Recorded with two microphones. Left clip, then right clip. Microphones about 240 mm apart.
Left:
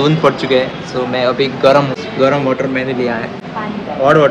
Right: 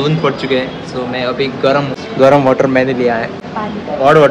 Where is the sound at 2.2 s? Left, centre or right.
Centre.